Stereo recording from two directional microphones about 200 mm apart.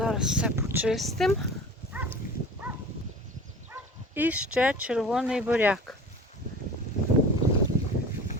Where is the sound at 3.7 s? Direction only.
10° right (ahead or behind).